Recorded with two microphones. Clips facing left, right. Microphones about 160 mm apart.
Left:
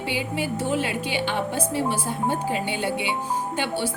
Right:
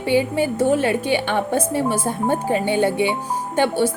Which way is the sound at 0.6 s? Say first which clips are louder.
Right 9 dB; 50° right (ahead or behind).